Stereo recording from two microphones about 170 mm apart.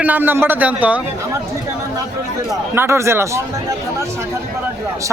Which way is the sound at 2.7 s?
15° right (ahead or behind).